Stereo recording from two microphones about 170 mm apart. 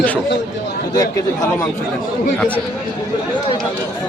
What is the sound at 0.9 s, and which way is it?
Speech, 20° left (ahead or behind).